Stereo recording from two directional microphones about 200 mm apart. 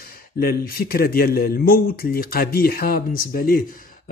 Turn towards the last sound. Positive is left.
turn(degrees=45)  # may be behind; listen again after turning